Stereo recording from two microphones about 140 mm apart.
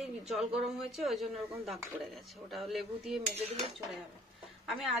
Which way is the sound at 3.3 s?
45° right (ahead or behind).